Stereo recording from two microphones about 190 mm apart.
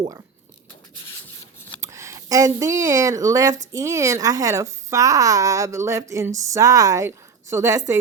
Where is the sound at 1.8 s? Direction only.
15° right (ahead or behind).